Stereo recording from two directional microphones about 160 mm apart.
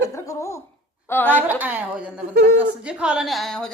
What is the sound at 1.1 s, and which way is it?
Speech, 10° left (ahead or behind).